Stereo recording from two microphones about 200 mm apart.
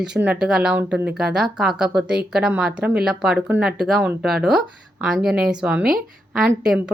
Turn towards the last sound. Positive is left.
turn(degrees=-5)  # may be behind; listen again after turning